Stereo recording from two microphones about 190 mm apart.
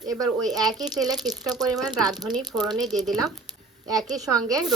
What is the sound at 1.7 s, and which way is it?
Frying, 5° right (ahead or behind).